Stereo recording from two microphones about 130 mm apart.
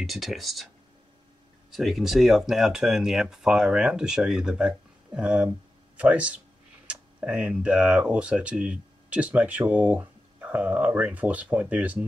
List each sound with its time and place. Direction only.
0.0 s speech: centre (ahead or behind)
1.7 s speech: centre (ahead or behind)